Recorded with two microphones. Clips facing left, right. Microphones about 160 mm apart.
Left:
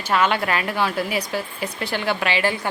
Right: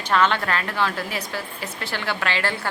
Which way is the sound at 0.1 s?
10° left (ahead or behind).